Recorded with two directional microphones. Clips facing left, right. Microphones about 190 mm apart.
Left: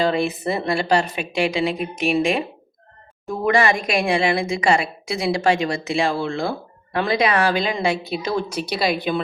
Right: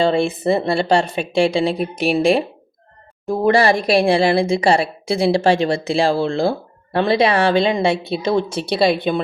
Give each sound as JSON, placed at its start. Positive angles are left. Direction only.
{"t": 0.0, "sound": "a woman's voice", "side_deg": -30}